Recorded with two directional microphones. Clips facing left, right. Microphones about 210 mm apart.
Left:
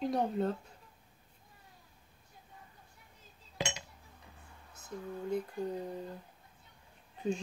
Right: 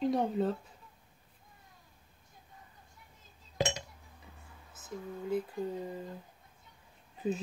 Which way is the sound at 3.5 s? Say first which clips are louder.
Right 6 dB; 45° right (ahead or behind).